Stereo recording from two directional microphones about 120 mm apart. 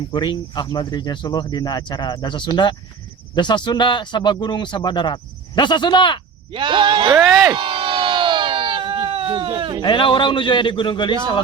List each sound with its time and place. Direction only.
0.1 s speech: 40° left (ahead or behind)
6.5 s speech: 45° right (ahead or behind)
7.2 s speech: centre (ahead or behind)
7.5 s a sound: 45° right (ahead or behind)
9.8 s speech: 45° left (ahead or behind)